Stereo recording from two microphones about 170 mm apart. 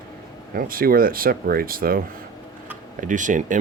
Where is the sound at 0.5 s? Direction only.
60° right (ahead or behind).